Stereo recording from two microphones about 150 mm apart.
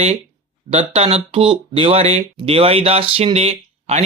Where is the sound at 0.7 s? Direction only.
45° right (ahead or behind).